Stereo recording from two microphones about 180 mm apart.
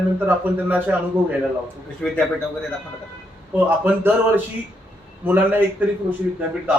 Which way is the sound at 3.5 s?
10° right (ahead or behind).